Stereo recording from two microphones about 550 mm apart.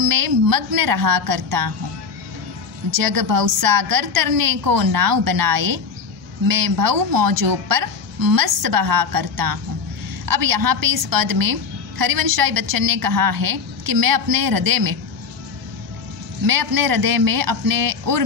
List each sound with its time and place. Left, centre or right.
0.0 s a woman's voice: right
3.0 s a woman's voice: right
16.4 s a woman's voice: right